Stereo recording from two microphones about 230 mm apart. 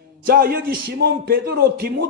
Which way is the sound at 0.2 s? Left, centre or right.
Right.